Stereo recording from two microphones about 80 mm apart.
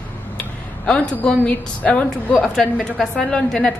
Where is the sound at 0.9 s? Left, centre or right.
Centre.